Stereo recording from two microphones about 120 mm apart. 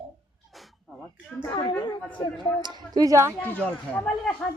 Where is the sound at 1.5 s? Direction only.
40° left (ahead or behind).